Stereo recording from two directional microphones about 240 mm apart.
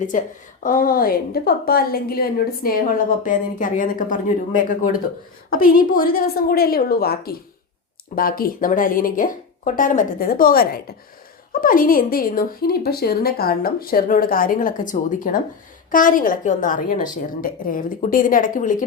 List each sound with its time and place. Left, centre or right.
0.1 s a woman's voice: left